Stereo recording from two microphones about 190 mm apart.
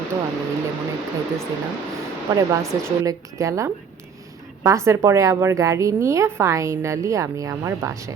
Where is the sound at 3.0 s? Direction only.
15° right (ahead or behind).